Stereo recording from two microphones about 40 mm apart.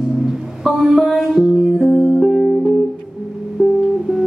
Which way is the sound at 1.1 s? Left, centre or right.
Centre.